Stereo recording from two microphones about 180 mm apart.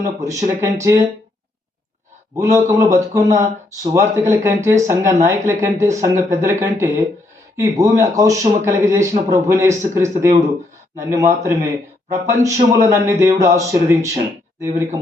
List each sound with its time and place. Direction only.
0.0 s speech: 15° right (ahead or behind)
2.3 s speech: 15° right (ahead or behind)